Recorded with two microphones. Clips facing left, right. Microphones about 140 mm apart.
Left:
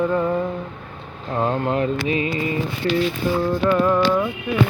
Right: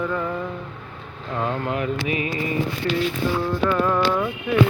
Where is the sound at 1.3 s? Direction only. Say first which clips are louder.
Left 4 dB; 30° left (ahead or behind).